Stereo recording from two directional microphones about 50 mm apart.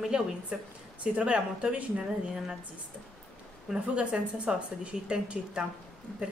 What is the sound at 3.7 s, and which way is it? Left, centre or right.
A woman's voice, right.